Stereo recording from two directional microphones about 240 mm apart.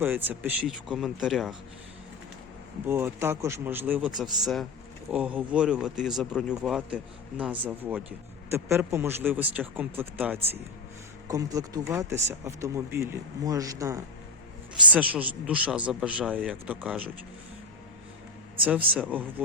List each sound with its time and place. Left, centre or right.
0.0 s speech: centre
2.8 s speech: centre
18.6 s speech: centre